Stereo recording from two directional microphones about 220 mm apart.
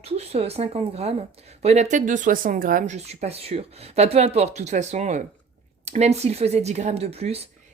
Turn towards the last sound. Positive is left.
turn(degrees=-30)  # may be behind; listen again after turning